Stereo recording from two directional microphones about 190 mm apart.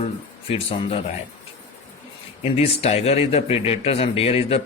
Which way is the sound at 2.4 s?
30° left (ahead or behind).